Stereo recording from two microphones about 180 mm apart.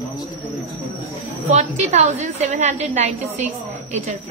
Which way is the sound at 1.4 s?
45° right (ahead or behind).